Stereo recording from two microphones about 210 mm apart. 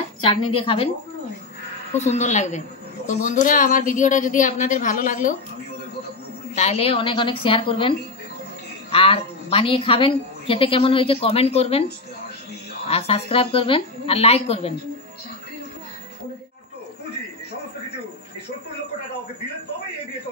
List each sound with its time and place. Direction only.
0.2 s a woman's voice: 25° left (ahead or behind)
2.0 s a woman's voice: 35° left (ahead or behind)
6.5 s a woman's voice: 30° left (ahead or behind)
8.9 s a woman's voice: 25° left (ahead or behind)
12.8 s a woman's voice: 30° left (ahead or behind)